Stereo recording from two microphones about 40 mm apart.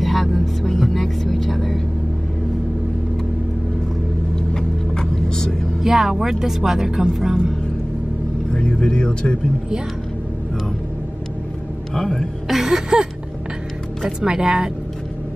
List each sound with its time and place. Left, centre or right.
0.0 s vehicle: centre
4.6 s vehicle: centre
5.8 s speech: centre
8.5 s speech: left
11.9 s music: centre
12.4 s music: centre
14.2 s speech: centre